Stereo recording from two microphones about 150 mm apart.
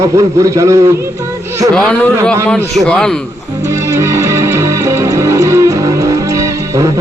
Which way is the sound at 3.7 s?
20° right (ahead or behind).